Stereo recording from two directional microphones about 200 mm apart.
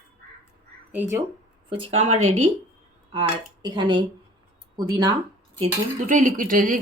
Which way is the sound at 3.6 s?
25° right (ahead or behind).